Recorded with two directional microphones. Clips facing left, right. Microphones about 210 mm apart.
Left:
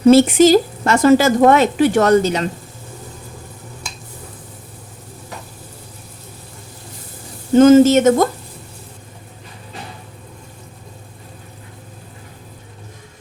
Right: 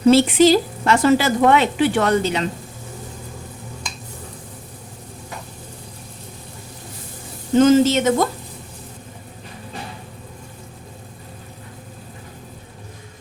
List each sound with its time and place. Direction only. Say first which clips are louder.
0.1 s a woman's voice: left 3 dB; 45° left (ahead or behind)
7.6 s a woman's voice: left 5 dB; 50° left (ahead or behind)